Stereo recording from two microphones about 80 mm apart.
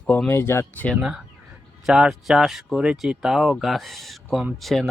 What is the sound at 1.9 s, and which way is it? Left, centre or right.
Speech, centre.